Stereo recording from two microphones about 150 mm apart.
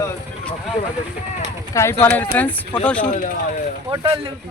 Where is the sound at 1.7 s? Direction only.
15° left (ahead or behind).